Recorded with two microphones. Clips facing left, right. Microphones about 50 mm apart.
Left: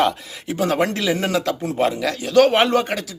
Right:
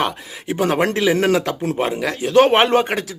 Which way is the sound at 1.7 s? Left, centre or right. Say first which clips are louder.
Left 1 dB; right.